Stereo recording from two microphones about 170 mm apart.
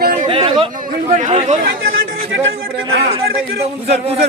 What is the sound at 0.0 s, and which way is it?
Chatter, 60° right (ahead or behind).